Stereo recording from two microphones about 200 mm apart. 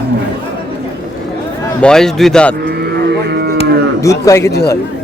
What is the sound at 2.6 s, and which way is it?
Cattle, 55° right (ahead or behind).